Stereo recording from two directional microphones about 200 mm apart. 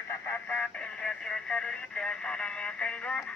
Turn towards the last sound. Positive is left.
turn(degrees=5)  # may be behind; listen again after turning